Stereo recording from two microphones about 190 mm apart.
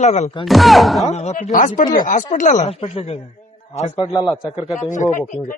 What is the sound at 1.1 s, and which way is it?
A man's voice, 35° left (ahead or behind).